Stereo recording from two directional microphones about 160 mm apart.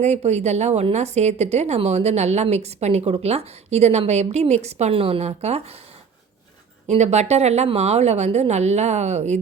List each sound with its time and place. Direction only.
0.0 s a woman's voice: 45° right (ahead or behind)
6.8 s a woman's voice: 45° right (ahead or behind)